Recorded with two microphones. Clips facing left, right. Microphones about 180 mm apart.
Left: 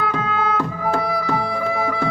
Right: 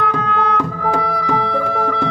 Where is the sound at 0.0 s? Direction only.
5° left (ahead or behind).